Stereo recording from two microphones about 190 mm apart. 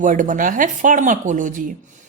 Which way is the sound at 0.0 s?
45° right (ahead or behind).